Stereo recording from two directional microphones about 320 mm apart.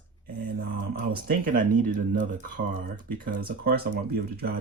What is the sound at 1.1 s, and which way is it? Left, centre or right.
Speech, right.